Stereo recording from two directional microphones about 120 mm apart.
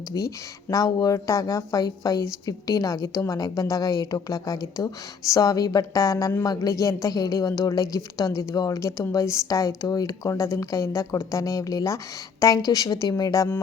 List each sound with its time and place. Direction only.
0.1 s a woman's voice: 30° left (ahead or behind)